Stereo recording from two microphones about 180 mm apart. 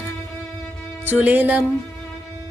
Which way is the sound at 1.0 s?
10° right (ahead or behind).